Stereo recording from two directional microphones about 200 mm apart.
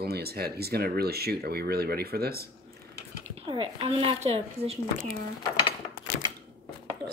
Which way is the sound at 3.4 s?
25° right (ahead or behind).